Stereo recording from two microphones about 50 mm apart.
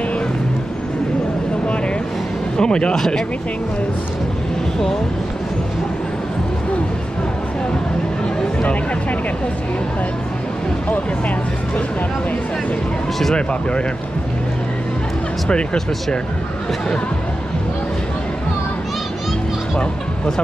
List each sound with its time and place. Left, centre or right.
2.5 s speech: centre
13.5 s speech: left
15.5 s speech: centre